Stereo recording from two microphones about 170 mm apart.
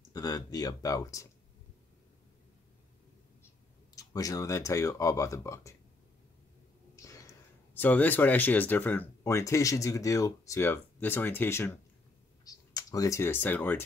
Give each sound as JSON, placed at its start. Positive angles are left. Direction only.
{"t": 0.1, "sound": "speech", "side_deg": 20}
{"t": 3.9, "sound": "speech", "side_deg": 20}
{"t": 7.0, "sound": "speech", "side_deg": 20}